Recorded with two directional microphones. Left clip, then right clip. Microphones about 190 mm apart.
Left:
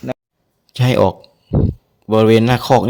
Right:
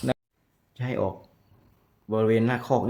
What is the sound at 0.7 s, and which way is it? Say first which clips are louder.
Speech: left 15 dB; 50° left (ahead or behind).